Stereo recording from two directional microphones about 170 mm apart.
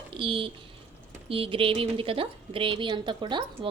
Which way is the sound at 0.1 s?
30° right (ahead or behind).